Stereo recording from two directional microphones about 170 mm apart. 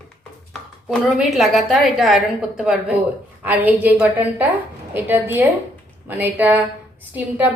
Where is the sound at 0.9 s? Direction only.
Centre (ahead or behind).